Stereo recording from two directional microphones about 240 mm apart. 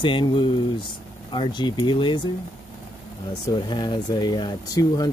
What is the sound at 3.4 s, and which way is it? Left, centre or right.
Speech, centre.